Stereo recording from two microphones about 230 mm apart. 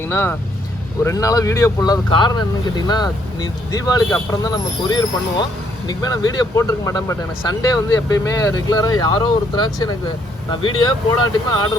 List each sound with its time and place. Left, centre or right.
0.1 s speech: centre